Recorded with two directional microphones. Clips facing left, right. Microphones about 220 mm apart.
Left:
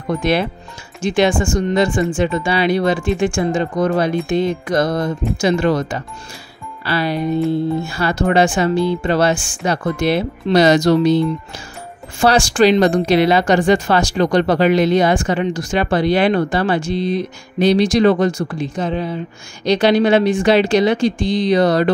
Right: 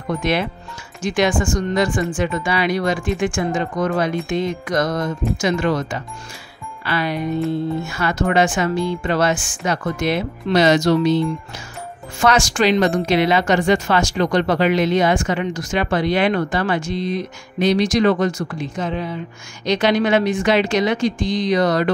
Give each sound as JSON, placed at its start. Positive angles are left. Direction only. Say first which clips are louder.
{"t": 0.2, "sound": "a woman's voice", "louder": "left 3 dB", "side_deg": 35}
{"t": 12.2, "sound": "a woman's voice", "louder": "left 4 dB", "side_deg": 30}